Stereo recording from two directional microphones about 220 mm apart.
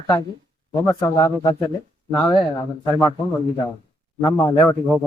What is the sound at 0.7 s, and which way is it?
Speech, 15° left (ahead or behind).